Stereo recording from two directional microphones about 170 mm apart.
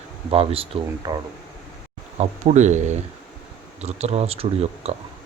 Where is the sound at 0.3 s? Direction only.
35° right (ahead or behind).